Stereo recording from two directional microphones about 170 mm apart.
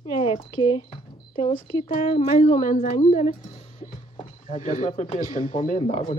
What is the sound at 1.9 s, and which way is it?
Speech, 50° left (ahead or behind).